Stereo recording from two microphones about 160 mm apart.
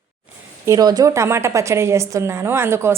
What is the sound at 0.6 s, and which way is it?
A woman's voice, 20° right (ahead or behind).